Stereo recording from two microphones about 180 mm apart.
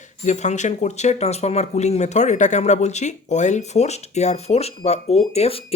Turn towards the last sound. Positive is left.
turn(degrees=35)  # may be behind; listen again after turning